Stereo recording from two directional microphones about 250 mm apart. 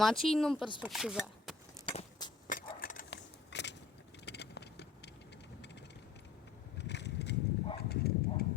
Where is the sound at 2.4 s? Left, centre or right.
Left.